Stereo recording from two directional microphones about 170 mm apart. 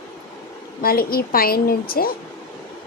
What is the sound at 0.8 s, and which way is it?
A woman's voice, 60° left (ahead or behind).